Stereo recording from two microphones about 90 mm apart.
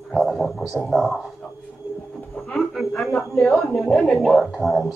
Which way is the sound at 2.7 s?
Centre (ahead or behind).